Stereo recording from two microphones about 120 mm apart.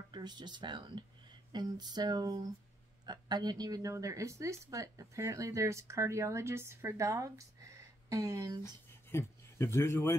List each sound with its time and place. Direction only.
0.1 s a sound: 35° right (ahead or behind)
3.1 s a woman's voice: 35° right (ahead or behind)
9.1 s a man's voice: 20° left (ahead or behind)